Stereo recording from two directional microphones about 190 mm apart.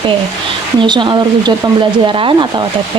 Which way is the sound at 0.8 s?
25° right (ahead or behind).